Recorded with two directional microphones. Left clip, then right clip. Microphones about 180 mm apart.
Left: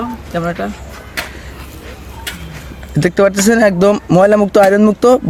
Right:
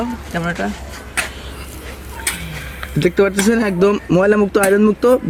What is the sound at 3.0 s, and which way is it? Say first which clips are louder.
Speech: left 3 dB; 75° left (ahead or behind).